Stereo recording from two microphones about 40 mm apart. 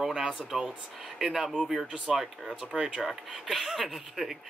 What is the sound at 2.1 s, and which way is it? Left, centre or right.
Speech, centre.